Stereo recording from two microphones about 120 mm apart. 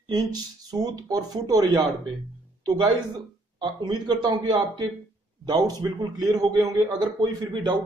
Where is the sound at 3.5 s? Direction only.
40° right (ahead or behind).